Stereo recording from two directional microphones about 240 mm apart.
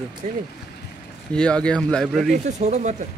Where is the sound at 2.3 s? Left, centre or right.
Right.